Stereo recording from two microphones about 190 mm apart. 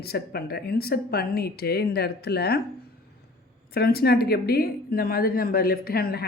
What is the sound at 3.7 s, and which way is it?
A woman's voice, 55° left (ahead or behind).